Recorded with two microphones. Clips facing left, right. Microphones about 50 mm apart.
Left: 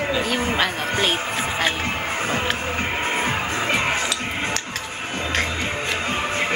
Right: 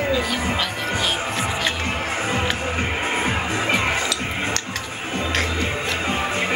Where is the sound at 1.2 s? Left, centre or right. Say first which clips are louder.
Even; centre.